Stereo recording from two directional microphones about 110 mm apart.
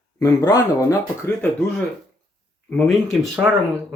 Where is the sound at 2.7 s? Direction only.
Centre (ahead or behind).